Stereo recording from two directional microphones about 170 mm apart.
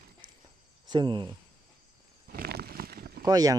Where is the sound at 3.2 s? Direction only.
20° right (ahead or behind).